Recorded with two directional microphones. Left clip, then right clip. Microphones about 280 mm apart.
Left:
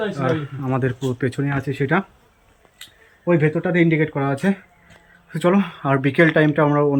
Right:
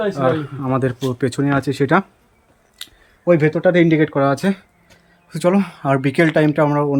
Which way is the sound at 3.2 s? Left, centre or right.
Centre.